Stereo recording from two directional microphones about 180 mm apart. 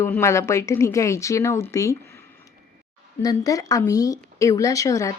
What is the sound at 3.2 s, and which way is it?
Speech, 20° left (ahead or behind).